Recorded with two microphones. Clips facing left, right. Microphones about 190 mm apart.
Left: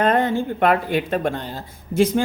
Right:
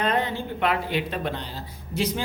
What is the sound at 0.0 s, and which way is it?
A woman's voice, 50° left (ahead or behind).